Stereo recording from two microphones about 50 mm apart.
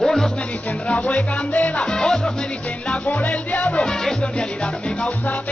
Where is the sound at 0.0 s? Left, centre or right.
Centre.